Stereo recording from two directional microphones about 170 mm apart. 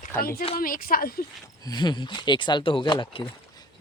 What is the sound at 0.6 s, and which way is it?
Speech, 55° left (ahead or behind).